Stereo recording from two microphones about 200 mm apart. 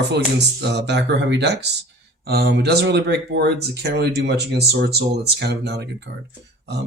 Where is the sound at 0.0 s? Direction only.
60° right (ahead or behind).